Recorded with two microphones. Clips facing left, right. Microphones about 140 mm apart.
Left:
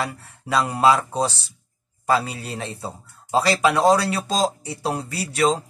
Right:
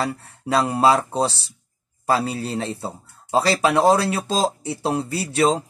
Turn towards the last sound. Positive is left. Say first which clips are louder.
# right 2 dB
turn(degrees=-30)  # may be behind; listen again after turning